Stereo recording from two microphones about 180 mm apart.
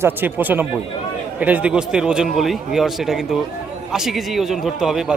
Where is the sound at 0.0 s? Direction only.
10° right (ahead or behind).